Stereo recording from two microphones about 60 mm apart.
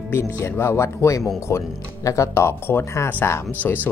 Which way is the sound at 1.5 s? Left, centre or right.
Left.